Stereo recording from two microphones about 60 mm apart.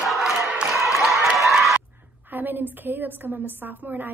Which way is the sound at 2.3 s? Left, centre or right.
Right.